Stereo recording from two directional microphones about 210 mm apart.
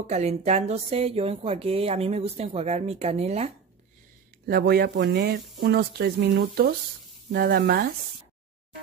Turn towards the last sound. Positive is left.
turn(degrees=-45)  # may be behind; listen again after turning